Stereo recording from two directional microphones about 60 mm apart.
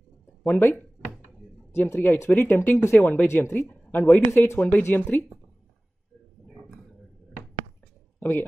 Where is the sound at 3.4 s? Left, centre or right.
Left.